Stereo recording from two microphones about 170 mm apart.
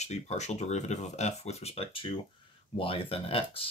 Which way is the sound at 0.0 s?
40° left (ahead or behind).